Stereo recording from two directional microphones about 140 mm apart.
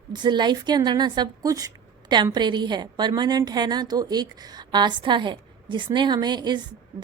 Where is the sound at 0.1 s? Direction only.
35° right (ahead or behind).